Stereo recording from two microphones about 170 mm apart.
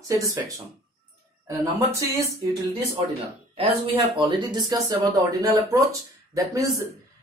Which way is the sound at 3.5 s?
30° right (ahead or behind).